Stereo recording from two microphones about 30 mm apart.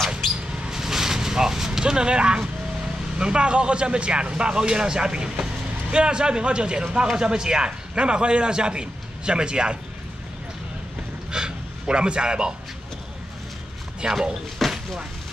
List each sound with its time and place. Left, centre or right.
0.7 s vehicle: centre
1.8 s speech: right
7.9 s a man's voice: right
11.3 s a sound: right
14.0 s speech: right
14.6 s a sound: centre